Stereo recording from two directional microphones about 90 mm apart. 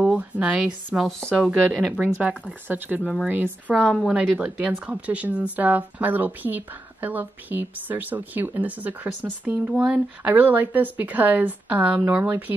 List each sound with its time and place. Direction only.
0.0 s a woman's voice: 15° right (ahead or behind)
0.9 s speech: centre (ahead or behind); by 3.7 s 20° right (ahead or behind)
3.7 s a woman's voice: 10° left (ahead or behind)
4.1 s speech: 15° right (ahead or behind)